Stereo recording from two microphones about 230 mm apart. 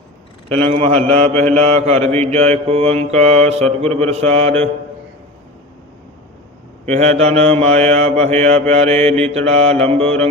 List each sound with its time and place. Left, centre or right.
0.9 s mantra: centre
1.6 s mantra: right
6.8 s mantra: right